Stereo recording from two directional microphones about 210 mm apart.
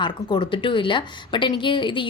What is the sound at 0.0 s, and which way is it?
A woman's voice, 20° left (ahead or behind).